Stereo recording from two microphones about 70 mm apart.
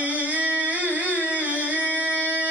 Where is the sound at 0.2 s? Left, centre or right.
Right.